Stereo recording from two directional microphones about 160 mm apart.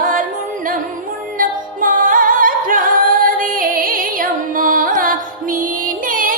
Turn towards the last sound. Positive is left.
turn(degrees=-60)  # may be behind; listen again after turning